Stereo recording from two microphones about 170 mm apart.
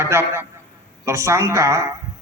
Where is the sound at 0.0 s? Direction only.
15° right (ahead or behind).